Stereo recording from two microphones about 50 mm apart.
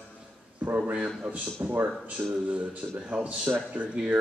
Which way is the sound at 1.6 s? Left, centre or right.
Right.